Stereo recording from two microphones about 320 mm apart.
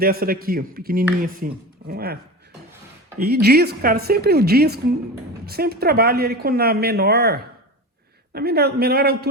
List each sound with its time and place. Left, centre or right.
0.0 s speech: right
3.2 s speech: right